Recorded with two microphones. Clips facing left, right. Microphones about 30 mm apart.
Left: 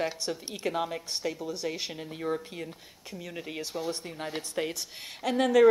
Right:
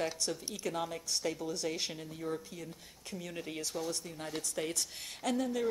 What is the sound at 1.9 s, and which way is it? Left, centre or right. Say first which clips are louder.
Speech: left 6 dB; left.